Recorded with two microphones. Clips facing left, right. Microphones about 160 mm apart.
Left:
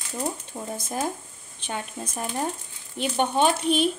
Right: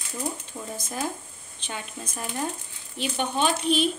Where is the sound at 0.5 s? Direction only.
40° left (ahead or behind).